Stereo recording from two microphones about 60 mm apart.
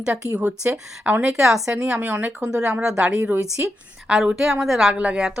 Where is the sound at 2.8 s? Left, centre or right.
Centre.